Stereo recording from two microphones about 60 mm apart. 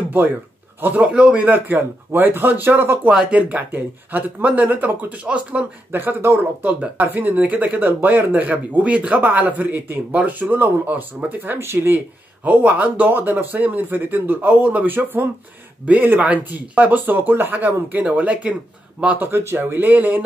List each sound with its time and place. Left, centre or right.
0.7 s speech: right
3.1 s speech: centre
5.9 s speech: right
12.4 s speech: right
19.1 s speech: right